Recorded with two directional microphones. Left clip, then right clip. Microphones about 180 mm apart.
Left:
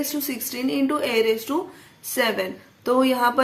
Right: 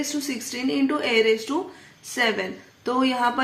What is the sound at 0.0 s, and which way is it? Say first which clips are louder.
A woman's voice: even; 20° left (ahead or behind).